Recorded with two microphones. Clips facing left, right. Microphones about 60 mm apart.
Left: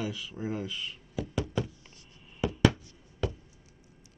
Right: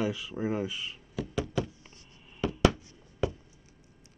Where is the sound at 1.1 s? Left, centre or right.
Centre.